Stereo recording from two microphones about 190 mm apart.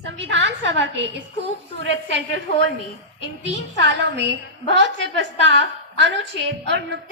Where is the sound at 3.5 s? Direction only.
70° right (ahead or behind).